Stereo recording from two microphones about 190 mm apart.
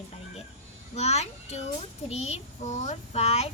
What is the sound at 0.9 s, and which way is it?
A child's voice, 35° left (ahead or behind).